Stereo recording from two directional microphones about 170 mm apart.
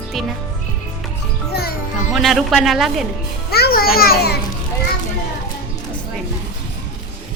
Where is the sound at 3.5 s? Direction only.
65° left (ahead or behind).